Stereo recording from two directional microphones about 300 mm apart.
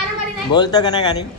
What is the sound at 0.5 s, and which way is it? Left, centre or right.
Speech, centre.